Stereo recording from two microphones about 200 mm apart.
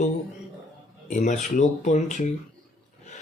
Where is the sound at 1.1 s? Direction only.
40° left (ahead or behind).